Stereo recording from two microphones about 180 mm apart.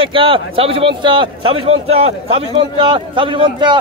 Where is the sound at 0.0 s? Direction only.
30° right (ahead or behind).